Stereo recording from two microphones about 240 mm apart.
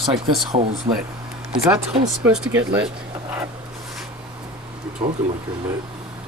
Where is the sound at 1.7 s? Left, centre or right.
Centre.